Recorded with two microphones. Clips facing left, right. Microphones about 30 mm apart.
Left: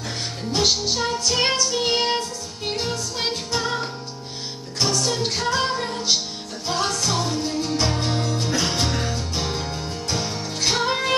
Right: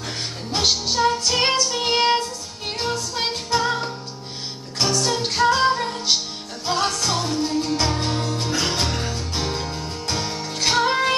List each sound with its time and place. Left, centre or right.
0.7 s music: centre
3.5 s music: centre
5.0 s music: centre
5.7 s music: centre
6.6 s music: centre
8.8 s music: centre